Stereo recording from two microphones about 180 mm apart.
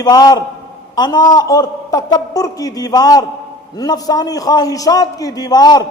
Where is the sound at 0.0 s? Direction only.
20° left (ahead or behind).